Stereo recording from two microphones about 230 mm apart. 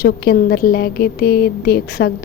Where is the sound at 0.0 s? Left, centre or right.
Left.